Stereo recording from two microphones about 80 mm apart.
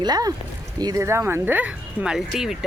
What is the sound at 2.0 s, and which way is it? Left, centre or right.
Speech, centre.